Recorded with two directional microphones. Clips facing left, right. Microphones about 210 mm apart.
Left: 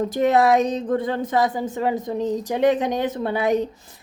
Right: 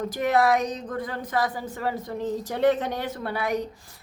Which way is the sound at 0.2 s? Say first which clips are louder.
Left 5 dB; 25° left (ahead or behind).